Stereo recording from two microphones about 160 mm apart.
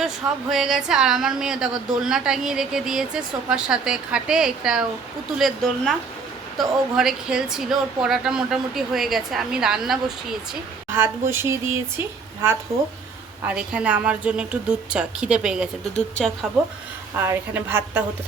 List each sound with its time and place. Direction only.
0.5 s a woman's voice: centre (ahead or behind)
10.9 s a woman's voice: 15° right (ahead or behind); by 16.5 s 5° left (ahead or behind)
17.2 s a woman's voice: 15° right (ahead or behind)